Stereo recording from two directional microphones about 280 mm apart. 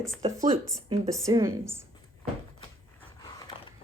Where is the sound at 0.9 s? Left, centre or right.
Centre.